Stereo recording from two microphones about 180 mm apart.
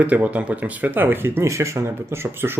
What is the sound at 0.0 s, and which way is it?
Speech, 10° right (ahead or behind).